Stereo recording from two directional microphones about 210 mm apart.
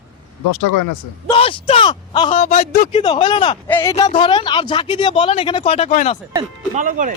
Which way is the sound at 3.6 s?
10° left (ahead or behind).